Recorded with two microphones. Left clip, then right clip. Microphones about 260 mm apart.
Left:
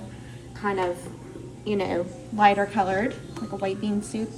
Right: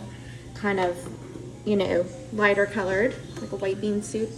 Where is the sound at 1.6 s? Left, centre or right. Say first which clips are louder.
Right 3 dB; centre.